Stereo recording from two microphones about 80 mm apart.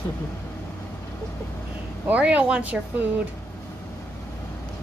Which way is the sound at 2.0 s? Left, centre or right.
Centre.